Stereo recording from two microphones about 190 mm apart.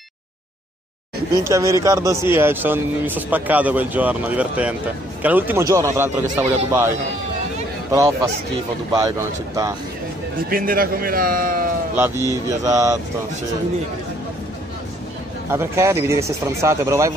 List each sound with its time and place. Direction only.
1.4 s speech: 15° right (ahead or behind)
7.9 s speech: 15° right (ahead or behind)
10.5 s a man's voice: 50° right (ahead or behind)
12.0 s speech: 15° right (ahead or behind)
15.5 s speech: 15° right (ahead or behind)